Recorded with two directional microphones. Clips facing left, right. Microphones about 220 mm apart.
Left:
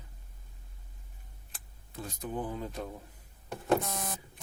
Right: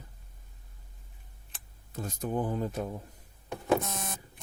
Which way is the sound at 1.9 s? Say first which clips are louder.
Right 5 dB; 45° right (ahead or behind).